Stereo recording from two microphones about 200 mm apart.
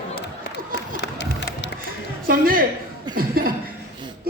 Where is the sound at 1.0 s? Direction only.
60° left (ahead or behind).